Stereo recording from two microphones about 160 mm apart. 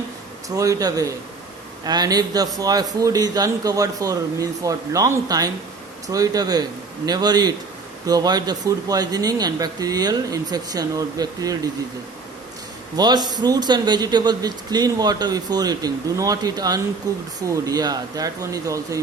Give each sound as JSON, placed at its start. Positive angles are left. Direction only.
{"t": 0.4, "sound": "a man's voice", "side_deg": -20}
{"t": 13.0, "sound": "a man's voice", "side_deg": -25}